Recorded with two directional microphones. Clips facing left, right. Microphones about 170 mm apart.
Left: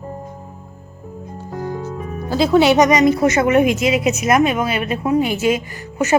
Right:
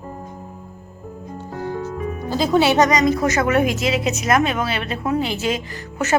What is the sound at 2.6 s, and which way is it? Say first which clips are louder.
A woman's voice: left 3 dB; 15° left (ahead or behind).